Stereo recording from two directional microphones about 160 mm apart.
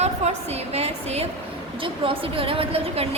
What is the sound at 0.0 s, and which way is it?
A woman's voice, 40° right (ahead or behind).